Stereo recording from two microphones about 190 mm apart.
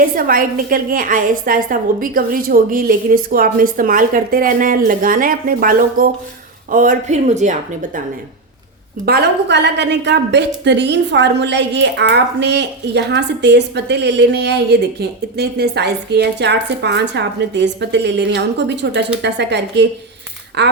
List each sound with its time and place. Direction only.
0.2 s a woman's voice: 50° right (ahead or behind)
9.0 s a woman's voice: 60° right (ahead or behind)